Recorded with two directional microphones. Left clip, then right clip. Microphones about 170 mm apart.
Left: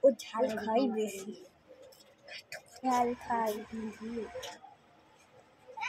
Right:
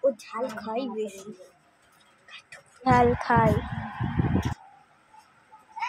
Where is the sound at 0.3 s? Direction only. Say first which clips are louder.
Even; 10° left (ahead or behind).